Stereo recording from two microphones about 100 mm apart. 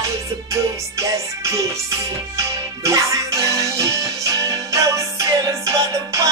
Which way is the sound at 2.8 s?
35° right (ahead or behind).